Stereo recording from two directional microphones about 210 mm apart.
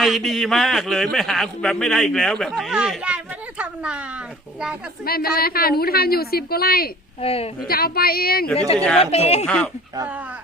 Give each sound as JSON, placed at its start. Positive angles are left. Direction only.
{"t": 0.0, "sound": "a man's voice", "side_deg": 0}
{"t": 5.0, "sound": "a woman's voice", "side_deg": 45}
{"t": 7.2, "sound": "speech", "side_deg": 30}
{"t": 7.7, "sound": "a woman's voice", "side_deg": 45}
{"t": 9.0, "sound": "speech", "side_deg": 30}